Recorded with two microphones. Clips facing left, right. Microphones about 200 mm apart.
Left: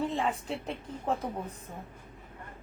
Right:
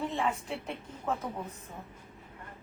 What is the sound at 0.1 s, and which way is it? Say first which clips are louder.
A woman's voice: left 1 dB; 35° left (ahead or behind).